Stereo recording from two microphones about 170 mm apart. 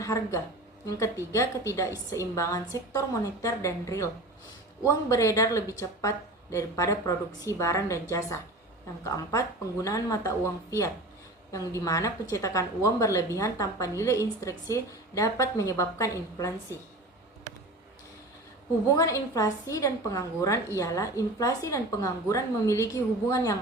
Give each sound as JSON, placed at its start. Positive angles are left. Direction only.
{"t": 0.0, "sound": "a woman's voice", "side_deg": 15}
{"t": 9.0, "sound": "a woman's voice", "side_deg": 20}
{"t": 18.9, "sound": "a woman's voice", "side_deg": 20}